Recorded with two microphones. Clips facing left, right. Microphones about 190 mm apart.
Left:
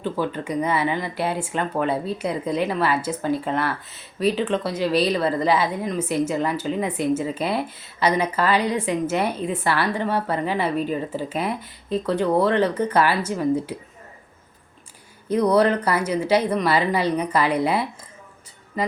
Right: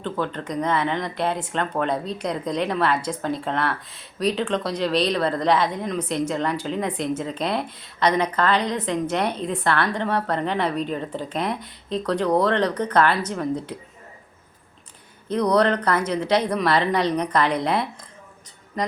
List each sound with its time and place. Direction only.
0.0 s speech: 5° left (ahead or behind)
15.3 s speech: 10° left (ahead or behind)